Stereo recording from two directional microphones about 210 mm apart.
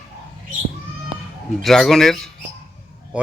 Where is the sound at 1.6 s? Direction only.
Centre (ahead or behind).